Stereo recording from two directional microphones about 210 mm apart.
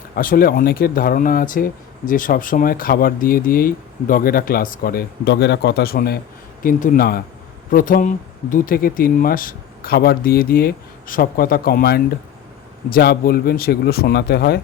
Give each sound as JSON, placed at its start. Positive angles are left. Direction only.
{"t": 0.2, "sound": "speech", "side_deg": 45}